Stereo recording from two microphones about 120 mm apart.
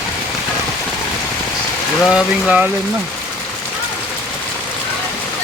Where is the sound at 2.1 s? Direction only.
5° right (ahead or behind).